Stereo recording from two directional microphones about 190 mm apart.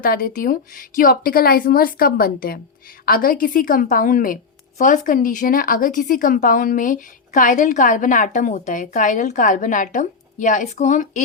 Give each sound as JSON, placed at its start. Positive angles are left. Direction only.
{"t": 0.0, "sound": "a woman's voice", "side_deg": 50}